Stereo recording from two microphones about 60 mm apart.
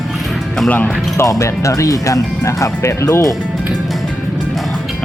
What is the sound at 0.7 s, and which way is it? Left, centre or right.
Speech, left.